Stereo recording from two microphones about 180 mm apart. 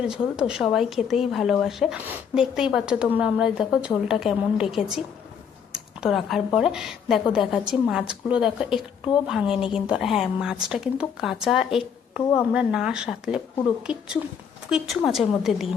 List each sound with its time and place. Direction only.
0.1 s a woman's voice: 5° right (ahead or behind)
14.7 s a woman's voice: centre (ahead or behind)